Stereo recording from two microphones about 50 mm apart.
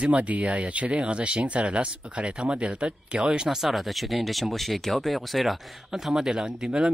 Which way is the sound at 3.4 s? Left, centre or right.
Centre.